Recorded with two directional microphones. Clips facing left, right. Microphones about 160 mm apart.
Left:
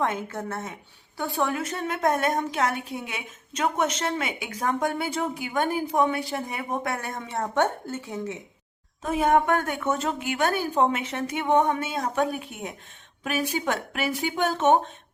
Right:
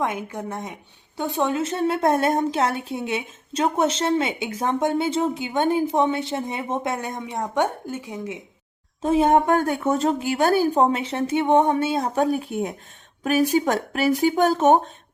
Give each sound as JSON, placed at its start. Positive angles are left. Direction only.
{"t": 0.0, "sound": "a woman's voice", "side_deg": -10}
{"t": 9.0, "sound": "speech", "side_deg": -30}